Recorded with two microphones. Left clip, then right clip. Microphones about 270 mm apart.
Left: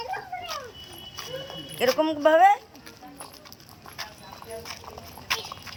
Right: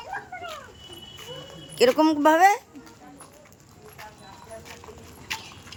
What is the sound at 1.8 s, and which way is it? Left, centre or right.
Speech, centre.